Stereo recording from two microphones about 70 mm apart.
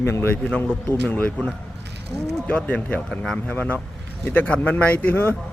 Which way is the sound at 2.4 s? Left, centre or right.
Left.